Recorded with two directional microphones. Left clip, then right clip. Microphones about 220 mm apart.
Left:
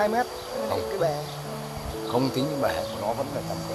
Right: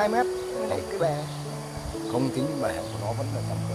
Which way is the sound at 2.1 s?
20° left (ahead or behind).